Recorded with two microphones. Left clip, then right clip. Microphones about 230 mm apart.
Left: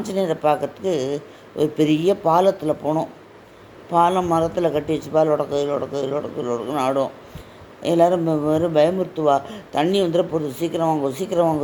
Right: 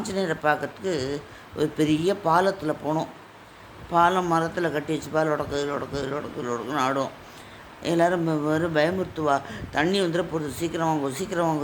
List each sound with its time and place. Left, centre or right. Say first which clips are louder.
0.0 s speech: left 5 dB; centre